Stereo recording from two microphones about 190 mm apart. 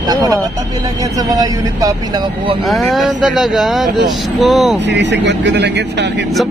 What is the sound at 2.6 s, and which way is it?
A man's voice, centre (ahead or behind).